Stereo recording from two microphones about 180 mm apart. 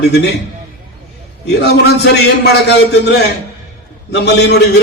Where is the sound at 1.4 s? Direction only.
65° left (ahead or behind).